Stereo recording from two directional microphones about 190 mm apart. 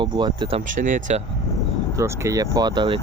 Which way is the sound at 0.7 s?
45° right (ahead or behind).